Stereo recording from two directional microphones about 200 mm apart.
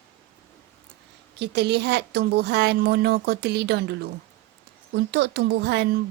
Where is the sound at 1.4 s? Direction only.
55° right (ahead or behind).